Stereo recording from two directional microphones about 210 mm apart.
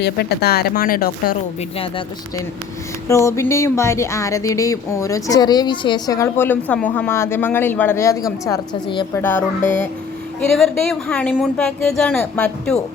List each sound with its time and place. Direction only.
0.0 s speech: 50° left (ahead or behind)
1.8 s speech: 25° left (ahead or behind)
3.1 s speech: 15° left (ahead or behind)
9.1 s speech: 10° left (ahead or behind)
9.6 s speech: 35° left (ahead or behind)
10.5 s speech: centre (ahead or behind)